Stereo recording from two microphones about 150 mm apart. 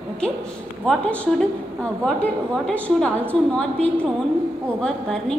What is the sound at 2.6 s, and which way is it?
A woman's voice, 10° left (ahead or behind).